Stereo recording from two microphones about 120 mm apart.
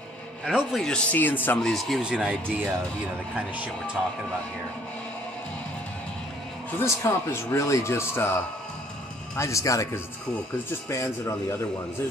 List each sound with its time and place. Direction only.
0.5 s speech: 5° right (ahead or behind)
0.8 s speech: 10° left (ahead or behind)
1.6 s speech: centre (ahead or behind)
6.8 s speech: 25° left (ahead or behind)
9.4 s speech: 25° left (ahead or behind)
10.9 s speech: 25° left (ahead or behind)